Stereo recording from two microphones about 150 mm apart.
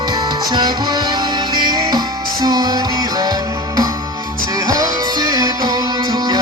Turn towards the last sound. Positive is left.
turn(degrees=-25)  # may be behind; listen again after turning